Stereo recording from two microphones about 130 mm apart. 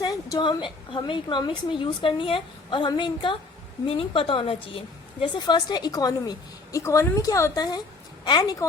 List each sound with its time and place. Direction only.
0.0 s a woman's voice: 30° left (ahead or behind)